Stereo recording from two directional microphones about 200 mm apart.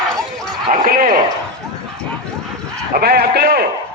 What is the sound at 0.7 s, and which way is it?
Bow-wow, 45° right (ahead or behind).